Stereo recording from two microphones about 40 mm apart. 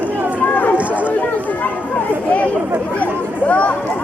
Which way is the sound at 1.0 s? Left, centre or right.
Left.